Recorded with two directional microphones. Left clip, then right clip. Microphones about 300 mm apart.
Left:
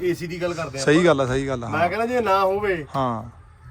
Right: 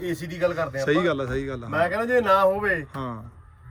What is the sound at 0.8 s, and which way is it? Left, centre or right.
Speech, centre.